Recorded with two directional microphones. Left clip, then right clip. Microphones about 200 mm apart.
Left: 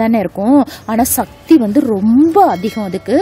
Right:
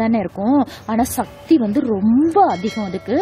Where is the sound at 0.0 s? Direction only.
60° left (ahead or behind).